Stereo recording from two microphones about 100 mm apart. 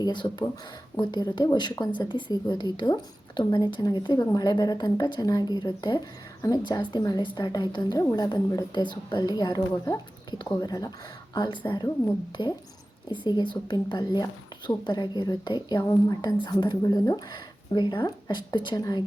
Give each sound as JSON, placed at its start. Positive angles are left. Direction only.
{"t": 0.0, "sound": "speech", "side_deg": 50}
{"t": 11.3, "sound": "speech", "side_deg": 50}
{"t": 13.1, "sound": "speech", "side_deg": 50}